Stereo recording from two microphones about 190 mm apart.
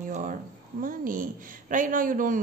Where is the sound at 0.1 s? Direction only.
45° right (ahead or behind).